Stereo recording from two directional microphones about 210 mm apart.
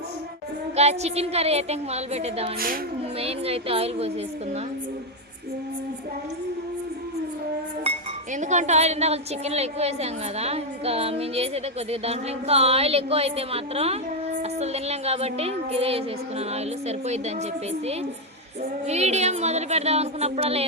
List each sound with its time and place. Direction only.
0.8 s speech: 30° right (ahead or behind)
7.9 s a woman's voice: 35° right (ahead or behind)
18.9 s a woman's voice: 30° right (ahead or behind)